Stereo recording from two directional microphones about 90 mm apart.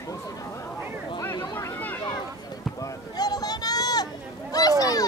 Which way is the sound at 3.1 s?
45° left (ahead or behind).